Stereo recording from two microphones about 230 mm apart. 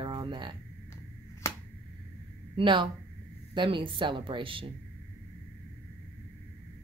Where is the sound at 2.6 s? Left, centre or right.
Right.